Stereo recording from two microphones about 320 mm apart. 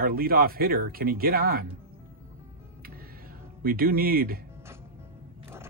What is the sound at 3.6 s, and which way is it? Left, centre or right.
Speech, right.